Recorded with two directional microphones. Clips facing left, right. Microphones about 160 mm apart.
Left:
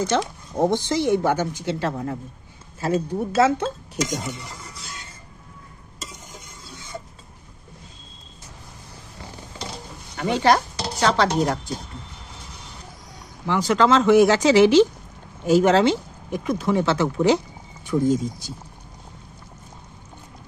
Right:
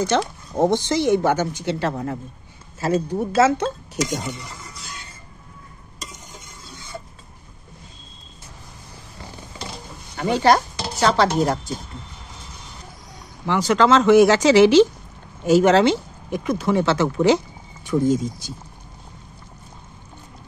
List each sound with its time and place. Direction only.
0.1 s speech: 75° right (ahead or behind)
0.6 s speech: 85° right
10.1 s speech: 40° right (ahead or behind)
13.5 s speech: 80° right
15.4 s speech: 80° right